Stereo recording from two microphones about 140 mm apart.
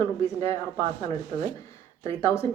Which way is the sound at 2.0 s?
20° left (ahead or behind).